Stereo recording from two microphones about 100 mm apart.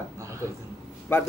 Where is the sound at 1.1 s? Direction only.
20° left (ahead or behind).